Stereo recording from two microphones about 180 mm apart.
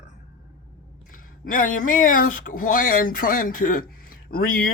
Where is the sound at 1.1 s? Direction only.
45° left (ahead or behind).